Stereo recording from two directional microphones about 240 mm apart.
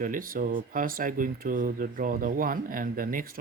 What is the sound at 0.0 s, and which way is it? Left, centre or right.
Speech, right.